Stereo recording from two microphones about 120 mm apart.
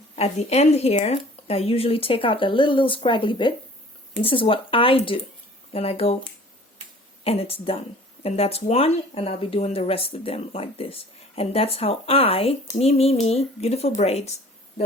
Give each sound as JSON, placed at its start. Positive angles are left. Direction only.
{"t": 0.2, "sound": "speech", "side_deg": 65}
{"t": 7.3, "sound": "speech", "side_deg": 55}